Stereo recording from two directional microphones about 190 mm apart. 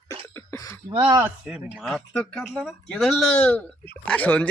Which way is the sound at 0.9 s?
25° right (ahead or behind).